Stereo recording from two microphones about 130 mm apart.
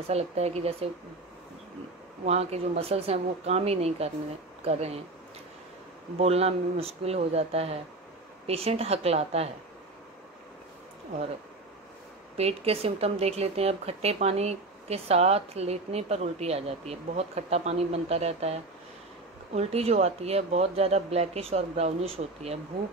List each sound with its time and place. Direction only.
0.1 s speech: 55° right (ahead or behind)
2.2 s speech: 55° right (ahead or behind)
6.1 s speech: 50° right (ahead or behind)
12.4 s speech: 50° right (ahead or behind)